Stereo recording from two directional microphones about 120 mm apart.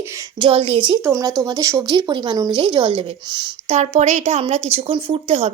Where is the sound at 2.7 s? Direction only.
45° right (ahead or behind).